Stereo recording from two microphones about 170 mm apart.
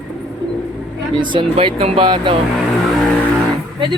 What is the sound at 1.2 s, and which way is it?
Speech, 30° right (ahead or behind).